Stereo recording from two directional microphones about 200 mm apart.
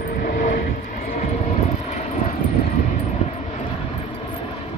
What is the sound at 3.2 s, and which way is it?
Vehicle, 30° left (ahead or behind).